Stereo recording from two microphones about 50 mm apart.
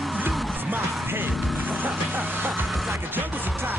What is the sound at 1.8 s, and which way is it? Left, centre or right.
Vehicle, right.